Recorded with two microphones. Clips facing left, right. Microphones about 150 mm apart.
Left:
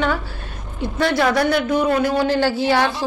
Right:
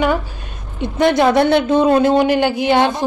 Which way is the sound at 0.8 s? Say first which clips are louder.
Right 5 dB; 20° right (ahead or behind).